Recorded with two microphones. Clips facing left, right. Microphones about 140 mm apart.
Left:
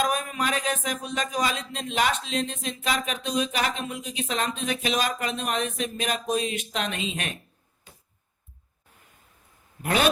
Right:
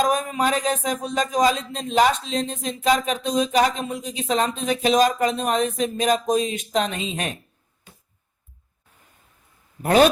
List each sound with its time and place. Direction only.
0.0 s speech: 35° right (ahead or behind)
9.8 s speech: 40° right (ahead or behind)